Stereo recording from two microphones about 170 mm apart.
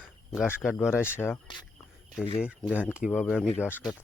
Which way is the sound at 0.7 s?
15° left (ahead or behind).